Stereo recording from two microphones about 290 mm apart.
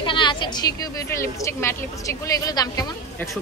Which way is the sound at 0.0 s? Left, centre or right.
Centre.